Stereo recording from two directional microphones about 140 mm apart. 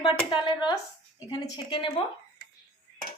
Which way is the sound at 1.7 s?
35° left (ahead or behind).